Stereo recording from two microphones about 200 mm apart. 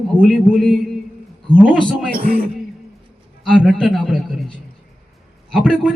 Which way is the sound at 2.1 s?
45° right (ahead or behind).